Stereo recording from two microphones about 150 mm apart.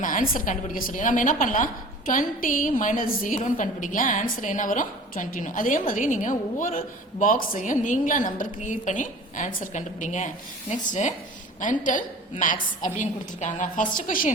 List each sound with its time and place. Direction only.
0.0 s a woman's voice: 65° left (ahead or behind)